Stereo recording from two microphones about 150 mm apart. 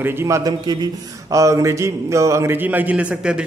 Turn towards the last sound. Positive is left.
turn(degrees=-10)  # may be behind; listen again after turning